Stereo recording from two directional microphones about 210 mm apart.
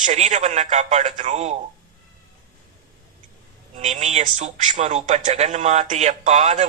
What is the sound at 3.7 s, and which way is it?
A man's voice, 35° right (ahead or behind).